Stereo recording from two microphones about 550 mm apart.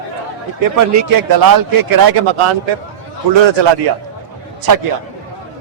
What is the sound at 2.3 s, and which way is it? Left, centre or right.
Speech, right.